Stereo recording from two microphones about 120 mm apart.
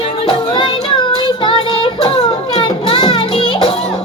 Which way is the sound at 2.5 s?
40° left (ahead or behind).